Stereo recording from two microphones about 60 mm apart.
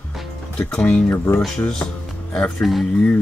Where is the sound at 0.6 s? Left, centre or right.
Centre.